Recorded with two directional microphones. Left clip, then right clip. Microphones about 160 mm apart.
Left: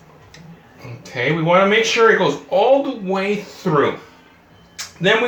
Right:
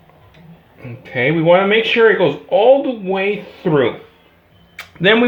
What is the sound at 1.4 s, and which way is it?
Speech, 40° right (ahead or behind).